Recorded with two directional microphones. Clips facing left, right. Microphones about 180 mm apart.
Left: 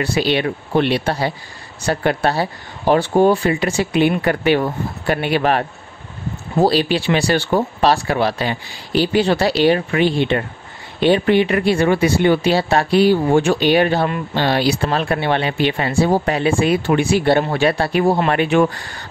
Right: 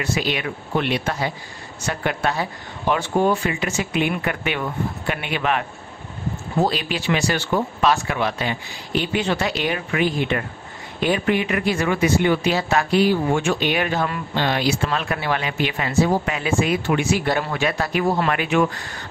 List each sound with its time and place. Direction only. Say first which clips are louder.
0.0 s speech: left 6 dB; 30° left (ahead or behind)